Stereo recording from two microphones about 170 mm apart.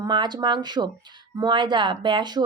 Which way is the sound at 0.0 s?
25° right (ahead or behind).